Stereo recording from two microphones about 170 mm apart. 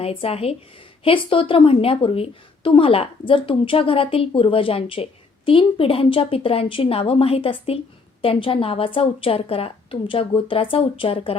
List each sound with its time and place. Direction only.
0.0 s a woman's voice: 35° left (ahead or behind)